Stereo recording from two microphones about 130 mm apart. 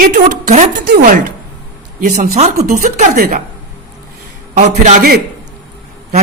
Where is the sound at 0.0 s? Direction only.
90° right.